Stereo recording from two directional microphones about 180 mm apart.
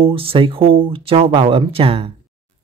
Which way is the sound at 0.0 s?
30° right (ahead or behind).